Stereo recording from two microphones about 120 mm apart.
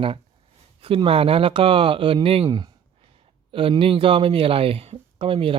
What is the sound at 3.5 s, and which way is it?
Speech, 50° right (ahead or behind).